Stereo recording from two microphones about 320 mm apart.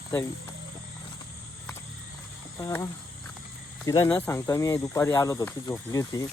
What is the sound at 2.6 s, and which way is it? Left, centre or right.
Speech, centre.